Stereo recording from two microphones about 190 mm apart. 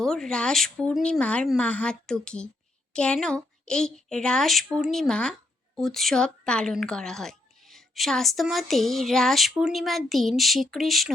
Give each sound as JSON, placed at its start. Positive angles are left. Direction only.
{"t": 0.0, "sound": "speech", "side_deg": 0}